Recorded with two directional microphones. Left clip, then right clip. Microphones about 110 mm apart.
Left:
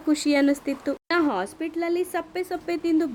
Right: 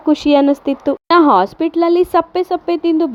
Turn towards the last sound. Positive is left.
turn(degrees=-30)  # may be behind; listen again after turning